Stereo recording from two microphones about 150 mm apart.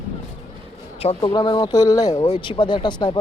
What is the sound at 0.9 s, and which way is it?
Speech, 40° left (ahead or behind).